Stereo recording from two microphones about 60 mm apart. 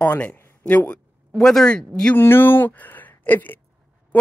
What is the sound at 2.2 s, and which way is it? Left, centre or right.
Speech, left.